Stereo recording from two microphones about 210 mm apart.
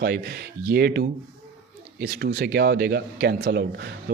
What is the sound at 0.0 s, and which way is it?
Speech, 50° right (ahead or behind).